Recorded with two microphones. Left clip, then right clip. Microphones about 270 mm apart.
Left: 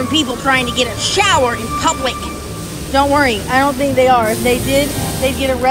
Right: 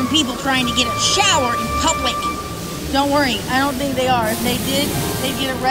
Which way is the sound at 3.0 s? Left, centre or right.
Right.